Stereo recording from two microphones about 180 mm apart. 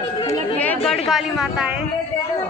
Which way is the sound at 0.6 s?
5° left (ahead or behind).